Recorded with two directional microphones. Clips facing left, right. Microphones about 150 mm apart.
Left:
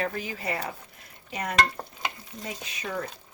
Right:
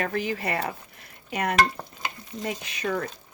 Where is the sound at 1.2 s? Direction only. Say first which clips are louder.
Right 5 dB; 70° right (ahead or behind).